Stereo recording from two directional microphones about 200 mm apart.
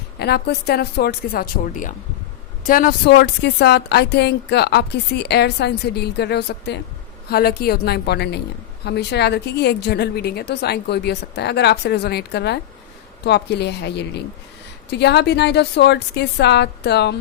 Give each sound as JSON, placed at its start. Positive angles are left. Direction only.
{"t": 0.2, "sound": "a woman's voice", "side_deg": 55}